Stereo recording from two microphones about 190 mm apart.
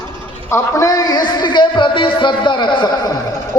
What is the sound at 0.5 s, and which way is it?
A man's voice, 15° left (ahead or behind).